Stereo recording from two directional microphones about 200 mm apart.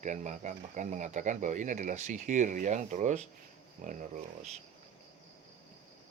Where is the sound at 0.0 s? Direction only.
35° right (ahead or behind).